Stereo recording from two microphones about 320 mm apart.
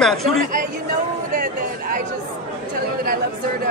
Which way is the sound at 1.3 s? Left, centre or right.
Right.